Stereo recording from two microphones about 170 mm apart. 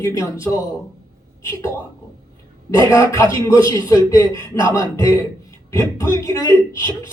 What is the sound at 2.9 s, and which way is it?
Speech, 20° left (ahead or behind).